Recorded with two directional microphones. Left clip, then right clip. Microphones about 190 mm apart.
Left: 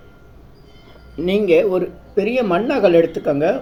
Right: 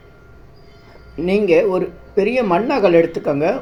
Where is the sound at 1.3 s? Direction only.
10° right (ahead or behind).